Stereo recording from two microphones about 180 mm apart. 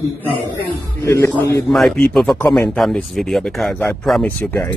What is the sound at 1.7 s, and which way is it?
A man's voice, centre (ahead or behind).